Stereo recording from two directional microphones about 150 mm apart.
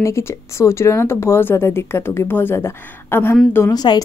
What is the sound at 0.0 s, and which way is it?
Speech, 20° left (ahead or behind).